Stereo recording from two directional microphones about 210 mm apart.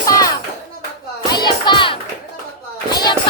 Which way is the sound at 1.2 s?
20° left (ahead or behind).